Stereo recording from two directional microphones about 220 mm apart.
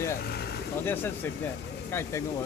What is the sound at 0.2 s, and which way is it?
Vehicle, 45° left (ahead or behind).